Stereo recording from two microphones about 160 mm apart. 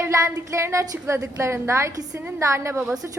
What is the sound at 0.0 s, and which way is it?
A woman's voice, 20° right (ahead or behind).